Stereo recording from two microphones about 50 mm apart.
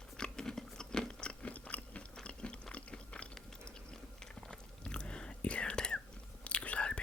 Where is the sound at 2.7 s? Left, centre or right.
Left.